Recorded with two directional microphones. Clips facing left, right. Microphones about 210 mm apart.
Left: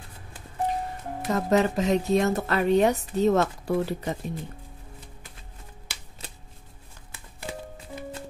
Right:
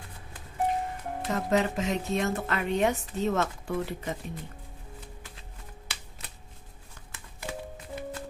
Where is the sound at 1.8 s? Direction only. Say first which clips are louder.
Left 6 dB; 40° left (ahead or behind).